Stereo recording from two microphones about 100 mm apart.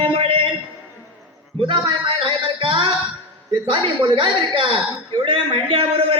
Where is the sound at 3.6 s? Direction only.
60° right (ahead or behind).